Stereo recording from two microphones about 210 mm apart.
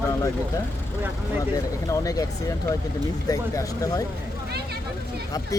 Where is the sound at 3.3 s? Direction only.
15° left (ahead or behind).